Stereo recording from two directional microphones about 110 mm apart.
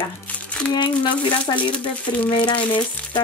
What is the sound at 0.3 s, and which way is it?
Crumpling, 15° left (ahead or behind).